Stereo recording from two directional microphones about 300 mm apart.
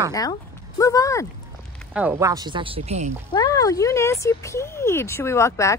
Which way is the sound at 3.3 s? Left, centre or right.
Centre.